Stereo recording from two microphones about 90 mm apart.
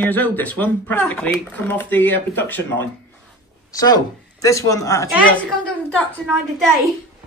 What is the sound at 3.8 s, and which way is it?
Speech, 45° left (ahead or behind).